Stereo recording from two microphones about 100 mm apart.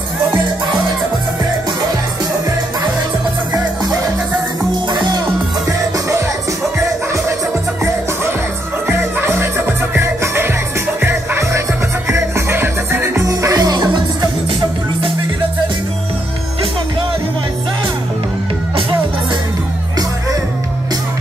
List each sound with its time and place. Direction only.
4.9 s music: 45° right (ahead or behind)
8.8 s music: 25° right (ahead or behind)
13.3 s music: 35° right (ahead or behind)